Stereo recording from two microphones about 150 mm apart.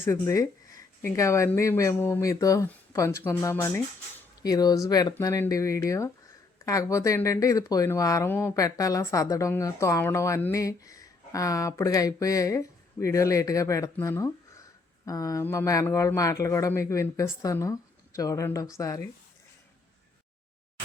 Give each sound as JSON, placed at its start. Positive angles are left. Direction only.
{"t": 0.0, "sound": "speech", "side_deg": 20}